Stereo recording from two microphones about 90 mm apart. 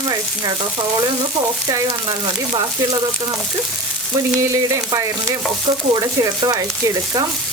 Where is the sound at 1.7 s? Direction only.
50° right (ahead or behind).